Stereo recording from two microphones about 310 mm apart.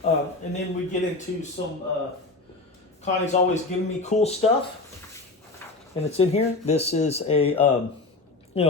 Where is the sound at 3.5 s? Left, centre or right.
Left.